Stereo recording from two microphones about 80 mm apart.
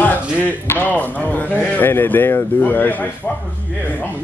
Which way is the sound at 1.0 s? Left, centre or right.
Centre.